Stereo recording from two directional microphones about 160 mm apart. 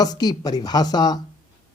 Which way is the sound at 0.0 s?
25° left (ahead or behind).